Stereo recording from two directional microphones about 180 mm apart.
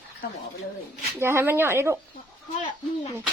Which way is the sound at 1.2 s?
15° right (ahead or behind).